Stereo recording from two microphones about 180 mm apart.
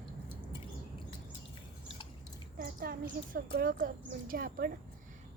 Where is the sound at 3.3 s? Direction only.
55° right (ahead or behind).